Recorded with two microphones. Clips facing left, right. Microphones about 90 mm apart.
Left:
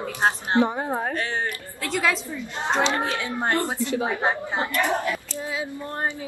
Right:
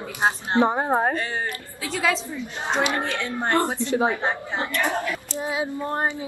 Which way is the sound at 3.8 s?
25° right (ahead or behind).